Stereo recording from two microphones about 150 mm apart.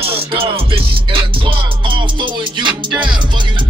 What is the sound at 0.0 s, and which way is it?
Music, 40° right (ahead or behind).